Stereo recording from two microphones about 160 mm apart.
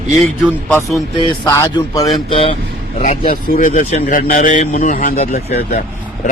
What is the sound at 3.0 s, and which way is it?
A man's voice, 55° left (ahead or behind).